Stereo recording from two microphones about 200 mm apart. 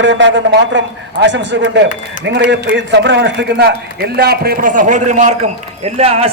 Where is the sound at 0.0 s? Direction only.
65° right (ahead or behind).